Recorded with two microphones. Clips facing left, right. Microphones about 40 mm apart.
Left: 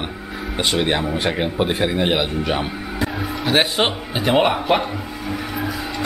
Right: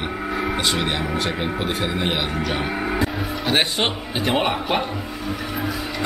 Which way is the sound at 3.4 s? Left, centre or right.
Centre.